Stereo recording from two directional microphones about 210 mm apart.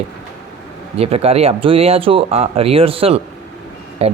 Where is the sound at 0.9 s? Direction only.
30° right (ahead or behind).